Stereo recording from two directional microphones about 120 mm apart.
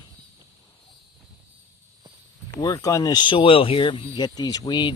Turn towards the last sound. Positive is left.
turn(degrees=40)  # may be behind; listen again after turning